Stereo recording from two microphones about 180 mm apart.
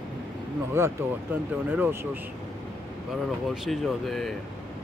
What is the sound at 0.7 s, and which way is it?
Speech, 10° right (ahead or behind).